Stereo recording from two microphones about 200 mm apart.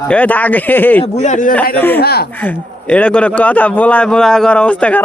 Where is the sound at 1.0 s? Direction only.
35° left (ahead or behind).